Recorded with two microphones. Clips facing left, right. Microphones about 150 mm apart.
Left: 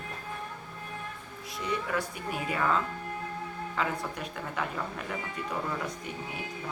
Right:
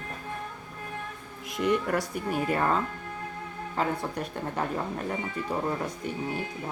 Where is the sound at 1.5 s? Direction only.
55° right (ahead or behind).